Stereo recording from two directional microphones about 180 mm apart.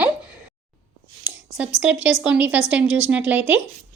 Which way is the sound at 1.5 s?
5° right (ahead or behind).